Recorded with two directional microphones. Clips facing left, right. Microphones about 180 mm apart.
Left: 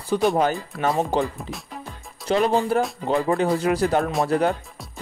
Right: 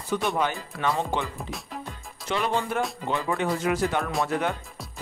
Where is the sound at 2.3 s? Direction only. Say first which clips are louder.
Left 7 dB; 35° left (ahead or behind).